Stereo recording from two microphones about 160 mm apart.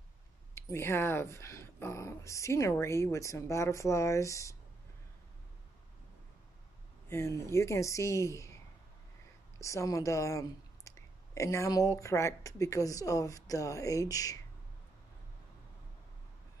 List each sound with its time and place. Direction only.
0.6 s speech: 15° left (ahead or behind)
7.1 s speech: 15° left (ahead or behind)
9.6 s speech: 20° left (ahead or behind)